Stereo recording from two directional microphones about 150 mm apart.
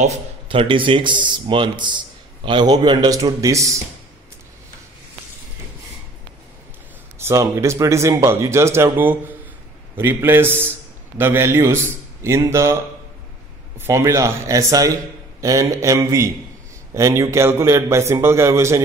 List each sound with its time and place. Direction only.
0.5 s a man's voice: 35° right (ahead or behind)
7.2 s a man's voice: 20° right (ahead or behind)
13.7 s speech: 20° right (ahead or behind)